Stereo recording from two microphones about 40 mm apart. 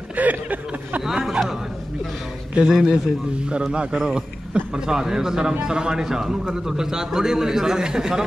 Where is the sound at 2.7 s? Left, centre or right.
Centre.